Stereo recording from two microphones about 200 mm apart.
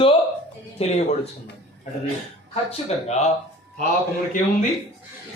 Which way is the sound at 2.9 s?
30° left (ahead or behind).